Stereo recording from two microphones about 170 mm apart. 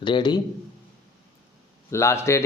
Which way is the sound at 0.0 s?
25° left (ahead or behind).